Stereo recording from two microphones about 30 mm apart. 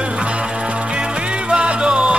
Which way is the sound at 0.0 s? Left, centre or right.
Right.